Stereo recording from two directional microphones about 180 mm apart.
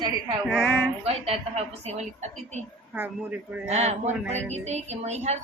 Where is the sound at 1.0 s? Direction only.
35° right (ahead or behind).